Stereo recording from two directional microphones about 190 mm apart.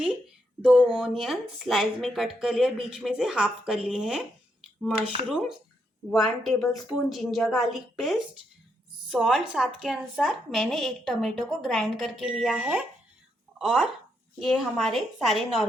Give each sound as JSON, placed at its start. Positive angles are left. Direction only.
{"t": 0.6, "sound": "a woman's voice", "side_deg": -5}
{"t": 6.1, "sound": "a woman's voice", "side_deg": 0}